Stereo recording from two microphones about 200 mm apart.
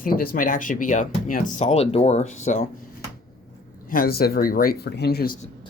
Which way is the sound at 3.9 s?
50° left (ahead or behind).